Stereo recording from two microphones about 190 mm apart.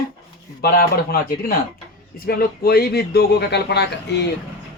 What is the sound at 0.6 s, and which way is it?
A man's voice, 55° left (ahead or behind).